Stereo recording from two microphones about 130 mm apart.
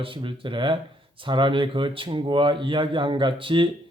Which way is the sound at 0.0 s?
40° right (ahead or behind).